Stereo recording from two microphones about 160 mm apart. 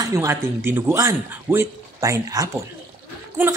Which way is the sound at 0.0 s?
20° right (ahead or behind).